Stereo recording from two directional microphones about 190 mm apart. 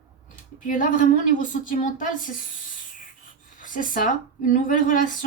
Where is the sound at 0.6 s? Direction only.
40° left (ahead or behind).